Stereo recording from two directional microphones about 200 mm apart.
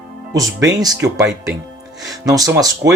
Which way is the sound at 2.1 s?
20° right (ahead or behind).